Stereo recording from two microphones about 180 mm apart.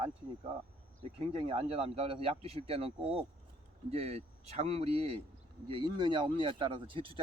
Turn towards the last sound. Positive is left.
turn(degrees=-30)  # may be behind; listen again after turning